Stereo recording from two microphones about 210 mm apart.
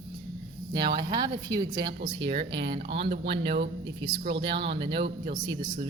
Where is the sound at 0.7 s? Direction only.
20° right (ahead or behind).